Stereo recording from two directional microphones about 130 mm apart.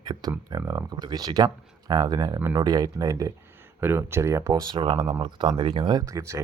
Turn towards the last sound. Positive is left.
turn(degrees=-25)  # may be behind; listen again after turning